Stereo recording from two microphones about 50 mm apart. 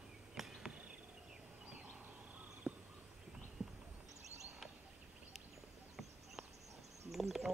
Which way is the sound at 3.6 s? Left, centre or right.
Centre.